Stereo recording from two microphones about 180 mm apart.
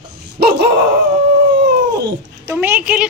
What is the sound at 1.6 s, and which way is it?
Dog, 70° right (ahead or behind).